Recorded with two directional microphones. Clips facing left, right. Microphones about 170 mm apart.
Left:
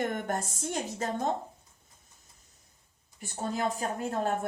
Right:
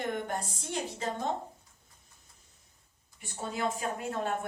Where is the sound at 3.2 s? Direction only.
40° left (ahead or behind).